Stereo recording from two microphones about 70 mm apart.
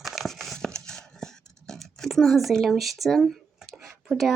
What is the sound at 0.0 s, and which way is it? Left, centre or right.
Dog, centre.